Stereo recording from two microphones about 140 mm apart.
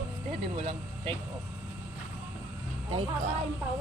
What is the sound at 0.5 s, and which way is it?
Speech, 40° right (ahead or behind).